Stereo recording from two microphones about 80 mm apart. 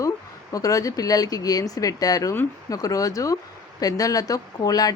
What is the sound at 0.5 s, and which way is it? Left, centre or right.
Speech, left.